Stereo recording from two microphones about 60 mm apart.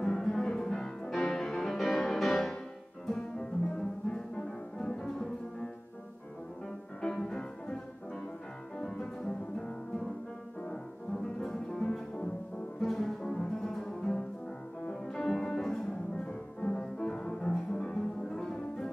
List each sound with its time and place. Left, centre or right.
0.0 s music: centre
7.0 s music: centre
8.7 s music: centre
11.4 s music: centre